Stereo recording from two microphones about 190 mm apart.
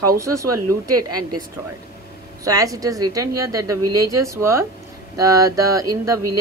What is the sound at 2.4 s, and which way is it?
Speech, 20° right (ahead or behind).